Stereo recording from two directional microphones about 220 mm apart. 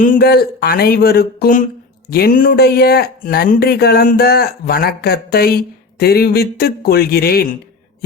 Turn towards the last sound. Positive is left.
turn(degrees=45)  # may be behind; listen again after turning